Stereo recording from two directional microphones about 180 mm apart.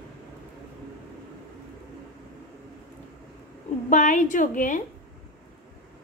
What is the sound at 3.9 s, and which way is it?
Speech, 45° left (ahead or behind).